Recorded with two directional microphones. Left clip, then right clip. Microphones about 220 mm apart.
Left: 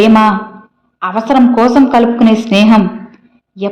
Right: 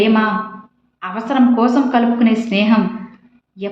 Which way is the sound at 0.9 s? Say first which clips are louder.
Left 7 dB; 40° left (ahead or behind).